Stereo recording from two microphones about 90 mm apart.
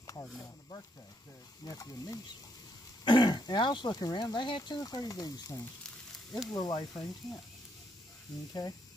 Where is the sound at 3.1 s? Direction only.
55° left (ahead or behind).